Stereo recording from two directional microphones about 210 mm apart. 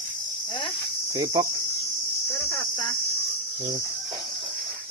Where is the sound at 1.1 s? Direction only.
20° right (ahead or behind).